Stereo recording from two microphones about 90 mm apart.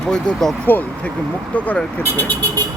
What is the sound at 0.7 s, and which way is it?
Speech, 20° left (ahead or behind).